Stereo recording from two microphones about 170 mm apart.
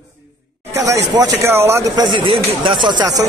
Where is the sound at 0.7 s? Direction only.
20° right (ahead or behind).